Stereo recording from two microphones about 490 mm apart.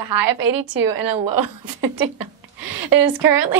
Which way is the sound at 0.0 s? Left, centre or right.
Right.